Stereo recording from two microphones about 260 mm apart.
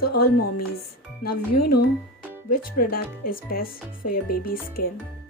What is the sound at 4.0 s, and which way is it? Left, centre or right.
Speech, left.